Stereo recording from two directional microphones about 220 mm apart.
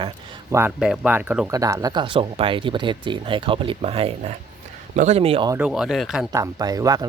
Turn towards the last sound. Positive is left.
turn(degrees=-15)  # may be behind; listen again after turning